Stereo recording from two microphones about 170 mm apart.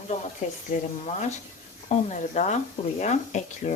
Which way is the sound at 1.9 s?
45° left (ahead or behind).